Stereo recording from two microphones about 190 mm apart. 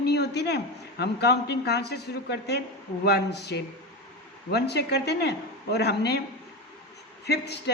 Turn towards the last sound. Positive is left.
turn(degrees=60)  # may be behind; listen again after turning